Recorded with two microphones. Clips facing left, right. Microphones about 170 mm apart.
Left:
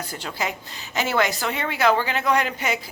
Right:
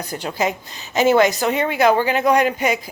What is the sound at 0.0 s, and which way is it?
A woman's voice, 20° right (ahead or behind).